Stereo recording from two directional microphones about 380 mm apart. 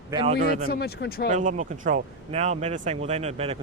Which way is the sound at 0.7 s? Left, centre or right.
Left.